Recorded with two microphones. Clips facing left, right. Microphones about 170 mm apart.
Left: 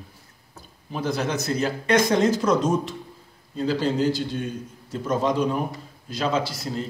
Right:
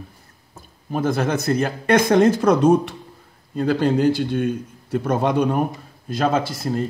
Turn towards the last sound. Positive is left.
turn(degrees=-50)  # may be behind; listen again after turning